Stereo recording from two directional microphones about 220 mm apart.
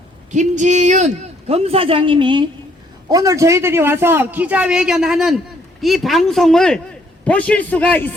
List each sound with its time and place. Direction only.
0.3 s a man's voice: 35° right (ahead or behind); by 8.1 s 10° left (ahead or behind)